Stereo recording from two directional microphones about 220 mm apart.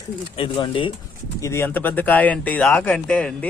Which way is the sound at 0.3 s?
25° left (ahead or behind).